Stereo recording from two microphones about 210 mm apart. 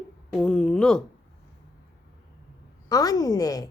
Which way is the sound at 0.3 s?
5° left (ahead or behind).